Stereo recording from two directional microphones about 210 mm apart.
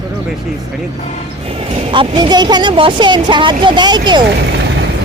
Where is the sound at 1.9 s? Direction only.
20° right (ahead or behind).